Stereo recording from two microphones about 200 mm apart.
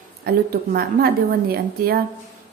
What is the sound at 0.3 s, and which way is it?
A woman's voice, 50° right (ahead or behind).